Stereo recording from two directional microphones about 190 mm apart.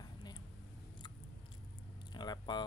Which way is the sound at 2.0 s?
20° left (ahead or behind).